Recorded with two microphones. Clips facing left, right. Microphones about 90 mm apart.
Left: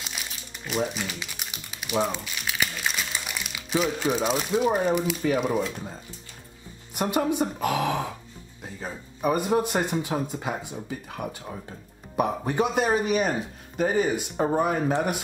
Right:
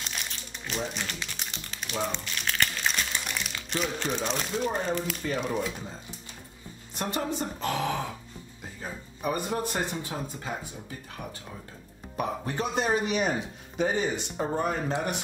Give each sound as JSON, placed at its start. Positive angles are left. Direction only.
{"t": 0.0, "sound": "speech", "side_deg": 5}
{"t": 9.2, "sound": "speech", "side_deg": 10}
{"t": 12.2, "sound": "speech", "side_deg": 15}
{"t": 12.8, "sound": "speech", "side_deg": 5}